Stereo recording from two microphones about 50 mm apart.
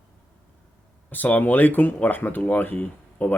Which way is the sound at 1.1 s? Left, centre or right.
Left.